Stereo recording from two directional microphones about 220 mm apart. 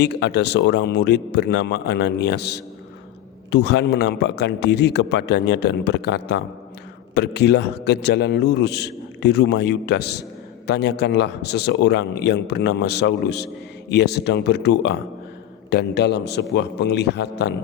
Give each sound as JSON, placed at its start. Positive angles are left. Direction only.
{"t": 0.0, "sound": "a man's voice", "side_deg": 50}